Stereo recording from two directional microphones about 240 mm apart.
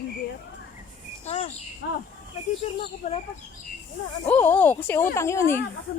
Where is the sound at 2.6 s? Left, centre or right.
Left.